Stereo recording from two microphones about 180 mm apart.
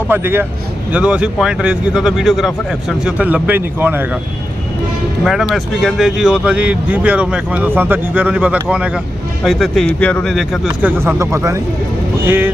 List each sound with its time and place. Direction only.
0.1 s speech: 10° right (ahead or behind)
5.2 s speech: centre (ahead or behind)
10.8 s speech: 15° right (ahead or behind)